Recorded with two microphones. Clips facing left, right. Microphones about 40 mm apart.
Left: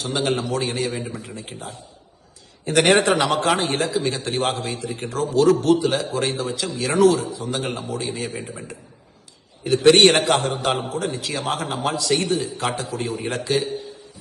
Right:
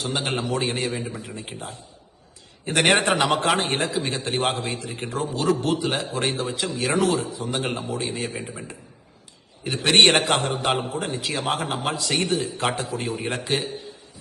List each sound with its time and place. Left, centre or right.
0.0 s a man's voice: right
3.2 s a man's voice: right
8.4 s a man's voice: centre
9.6 s a man's voice: right